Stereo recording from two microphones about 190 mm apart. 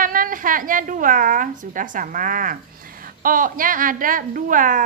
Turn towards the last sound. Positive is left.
turn(degrees=-45)  # may be behind; listen again after turning